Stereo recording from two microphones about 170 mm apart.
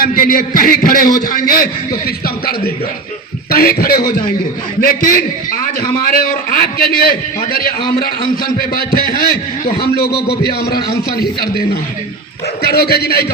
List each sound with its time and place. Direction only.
0.0 s a man's voice: 55° left (ahead or behind)